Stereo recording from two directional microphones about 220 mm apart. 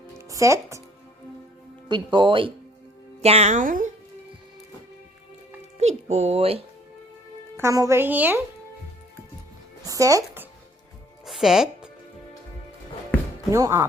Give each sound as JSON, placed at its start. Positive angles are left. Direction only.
{"t": 0.2, "sound": "speech", "side_deg": -15}
{"t": 1.9, "sound": "speech", "side_deg": -20}
{"t": 5.8, "sound": "speech", "side_deg": -30}
{"t": 7.5, "sound": "speech", "side_deg": -15}
{"t": 9.8, "sound": "speech", "side_deg": -15}
{"t": 11.3, "sound": "music", "side_deg": 0}
{"t": 13.5, "sound": "speech", "side_deg": -15}